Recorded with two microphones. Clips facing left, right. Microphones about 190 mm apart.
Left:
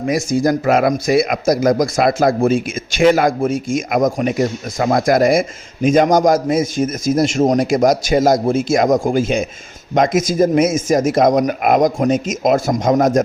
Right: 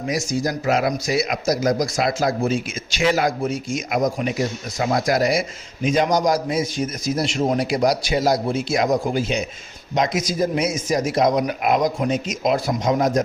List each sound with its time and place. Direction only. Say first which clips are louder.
0.1 s speech: left 7 dB; 55° left (ahead or behind)